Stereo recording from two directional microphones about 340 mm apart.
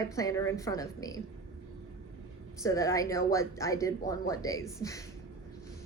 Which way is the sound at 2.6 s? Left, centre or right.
Centre.